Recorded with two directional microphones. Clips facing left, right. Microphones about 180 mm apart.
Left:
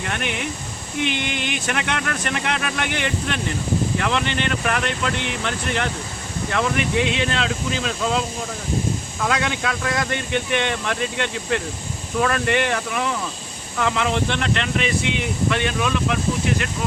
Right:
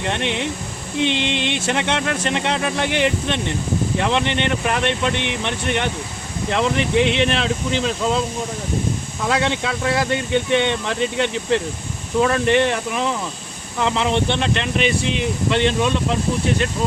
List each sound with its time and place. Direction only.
0.0 s speech: 25° right (ahead or behind)
9.3 s speech: 25° right (ahead or behind)